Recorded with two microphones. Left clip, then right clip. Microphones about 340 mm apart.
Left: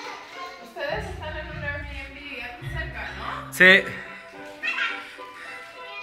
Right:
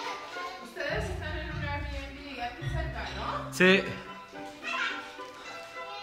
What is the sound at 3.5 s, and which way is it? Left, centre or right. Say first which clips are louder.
Speech: left 9 dB; centre.